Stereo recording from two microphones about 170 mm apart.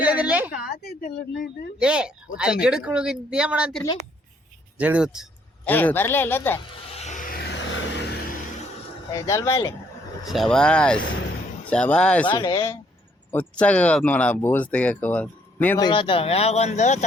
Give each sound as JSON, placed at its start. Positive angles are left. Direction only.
{"t": 0.0, "sound": "a sound", "side_deg": -10}
{"t": 0.5, "sound": "a woman's voice", "side_deg": 65}
{"t": 1.8, "sound": "speech", "side_deg": -5}
{"t": 5.6, "sound": "speech", "side_deg": 10}
{"t": 6.9, "sound": "music", "side_deg": 40}
{"t": 9.1, "sound": "speech", "side_deg": 20}
{"t": 10.2, "sound": "speech", "side_deg": 0}
{"t": 12.2, "sound": "speech", "side_deg": 25}
{"t": 13.3, "sound": "speech", "side_deg": 10}
{"t": 15.8, "sound": "speech", "side_deg": 30}